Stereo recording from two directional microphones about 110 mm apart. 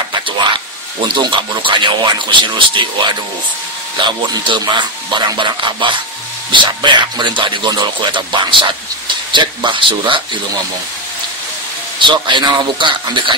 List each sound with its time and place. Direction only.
1.0 s speech: 45° right (ahead or behind)
12.0 s speech: 45° right (ahead or behind)